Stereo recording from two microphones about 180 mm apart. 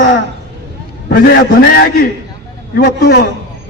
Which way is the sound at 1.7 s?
60° left (ahead or behind).